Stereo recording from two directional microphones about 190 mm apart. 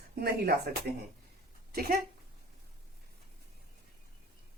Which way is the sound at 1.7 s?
55° right (ahead or behind).